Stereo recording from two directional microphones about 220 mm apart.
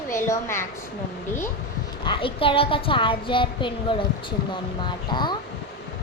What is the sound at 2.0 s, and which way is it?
A woman's voice, 25° left (ahead or behind).